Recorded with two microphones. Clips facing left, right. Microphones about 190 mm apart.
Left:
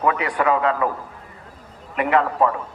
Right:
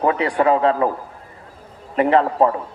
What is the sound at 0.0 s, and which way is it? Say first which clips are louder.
Speech: right 3 dB; 30° right (ahead or behind).